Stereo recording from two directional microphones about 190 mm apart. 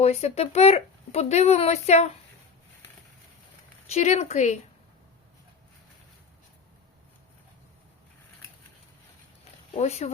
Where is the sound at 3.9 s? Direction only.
35° left (ahead or behind).